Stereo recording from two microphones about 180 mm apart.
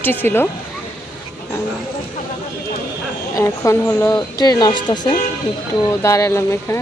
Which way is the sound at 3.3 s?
15° left (ahead or behind).